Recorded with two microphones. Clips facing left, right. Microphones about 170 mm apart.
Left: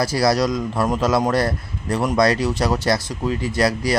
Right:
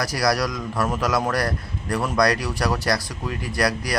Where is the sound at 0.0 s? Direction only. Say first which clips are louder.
Left 4 dB; 25° left (ahead or behind).